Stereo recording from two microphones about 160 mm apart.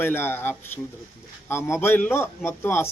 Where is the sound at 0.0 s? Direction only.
15° left (ahead or behind).